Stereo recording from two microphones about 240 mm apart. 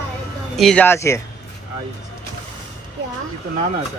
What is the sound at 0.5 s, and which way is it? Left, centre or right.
Speech, centre.